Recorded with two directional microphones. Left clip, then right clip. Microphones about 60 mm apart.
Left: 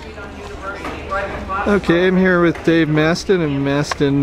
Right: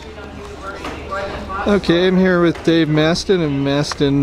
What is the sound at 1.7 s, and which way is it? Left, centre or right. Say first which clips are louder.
Speech: even; right.